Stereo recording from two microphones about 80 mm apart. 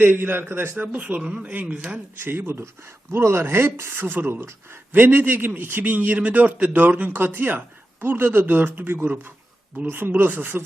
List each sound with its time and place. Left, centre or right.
0.0 s speech: right
2.2 s speech: right